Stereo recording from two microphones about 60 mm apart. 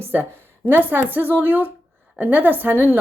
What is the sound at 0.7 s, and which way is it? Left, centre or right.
Speech, right.